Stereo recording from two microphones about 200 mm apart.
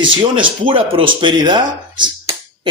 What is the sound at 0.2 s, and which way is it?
Speech, 25° right (ahead or behind).